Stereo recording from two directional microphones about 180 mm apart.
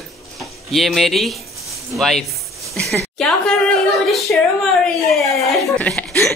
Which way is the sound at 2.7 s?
Centre (ahead or behind).